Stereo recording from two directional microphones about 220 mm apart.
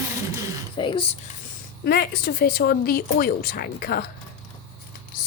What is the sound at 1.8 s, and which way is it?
Speech, 45° left (ahead or behind).